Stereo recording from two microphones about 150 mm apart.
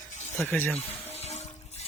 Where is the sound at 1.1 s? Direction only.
45° left (ahead or behind).